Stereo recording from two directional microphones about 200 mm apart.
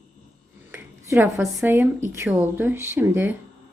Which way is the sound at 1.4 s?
10° right (ahead or behind).